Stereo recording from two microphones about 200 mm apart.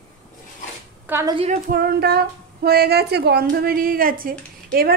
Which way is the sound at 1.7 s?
50° right (ahead or behind).